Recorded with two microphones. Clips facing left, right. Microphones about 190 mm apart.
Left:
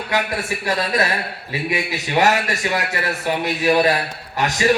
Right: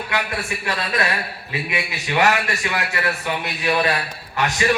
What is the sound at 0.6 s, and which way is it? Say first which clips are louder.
A man's voice: left 4 dB; 40° left (ahead or behind).